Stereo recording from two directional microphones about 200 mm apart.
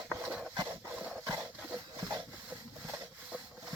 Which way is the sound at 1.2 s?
15° right (ahead or behind).